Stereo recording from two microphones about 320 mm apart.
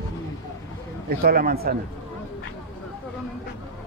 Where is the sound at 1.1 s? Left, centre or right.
Right.